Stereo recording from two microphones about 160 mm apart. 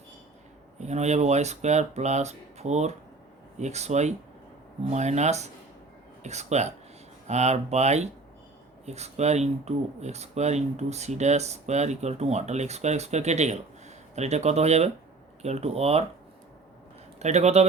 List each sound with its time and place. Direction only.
0.8 s speech: 45° right (ahead or behind)
17.2 s speech: 45° right (ahead or behind)